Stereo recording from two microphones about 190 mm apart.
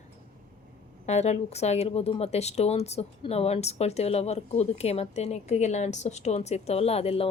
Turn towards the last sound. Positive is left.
turn(degrees=30)  # may be behind; listen again after turning